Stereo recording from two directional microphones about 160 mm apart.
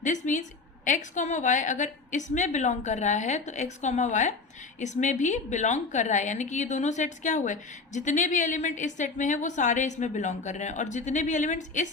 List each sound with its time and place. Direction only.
0.0 s a woman's voice: 50° left (ahead or behind)